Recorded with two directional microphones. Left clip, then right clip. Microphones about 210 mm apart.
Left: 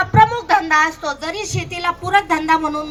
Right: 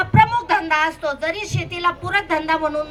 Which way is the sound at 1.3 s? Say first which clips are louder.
Left 1 dB; 25° left (ahead or behind).